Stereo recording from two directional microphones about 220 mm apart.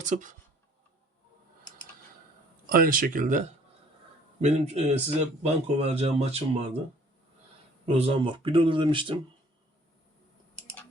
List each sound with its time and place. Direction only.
0.0 s speech: 35° right (ahead or behind)
2.6 s speech: 40° right (ahead or behind)
7.9 s speech: 25° right (ahead or behind)